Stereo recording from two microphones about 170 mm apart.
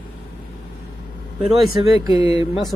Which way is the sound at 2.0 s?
20° right (ahead or behind).